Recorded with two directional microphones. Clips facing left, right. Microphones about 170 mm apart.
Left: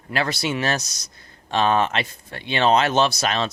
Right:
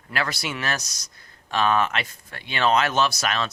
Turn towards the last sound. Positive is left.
turn(degrees=25)  # may be behind; listen again after turning